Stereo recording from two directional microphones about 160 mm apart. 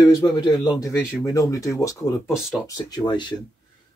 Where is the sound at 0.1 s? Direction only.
25° left (ahead or behind).